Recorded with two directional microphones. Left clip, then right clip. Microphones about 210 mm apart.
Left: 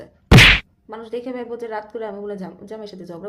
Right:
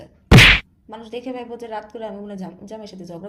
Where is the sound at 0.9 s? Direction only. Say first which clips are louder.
Left 2 dB; 20° left (ahead or behind).